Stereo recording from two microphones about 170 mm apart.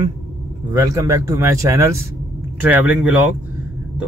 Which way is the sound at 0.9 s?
15° right (ahead or behind).